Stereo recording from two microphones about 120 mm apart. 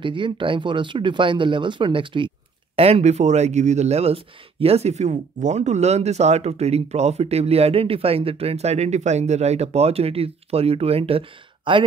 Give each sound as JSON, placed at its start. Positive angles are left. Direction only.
{"t": 0.0, "sound": "speech", "side_deg": -45}